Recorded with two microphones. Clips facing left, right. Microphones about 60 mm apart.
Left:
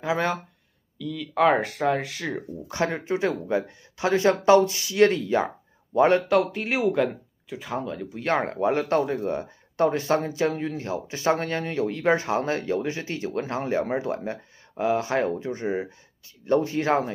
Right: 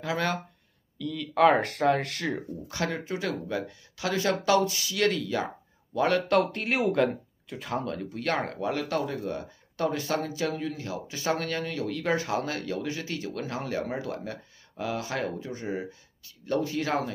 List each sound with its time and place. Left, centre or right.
0.0 s speech: left
0.9 s speech: centre
2.7 s speech: left
6.2 s speech: centre
8.2 s speech: left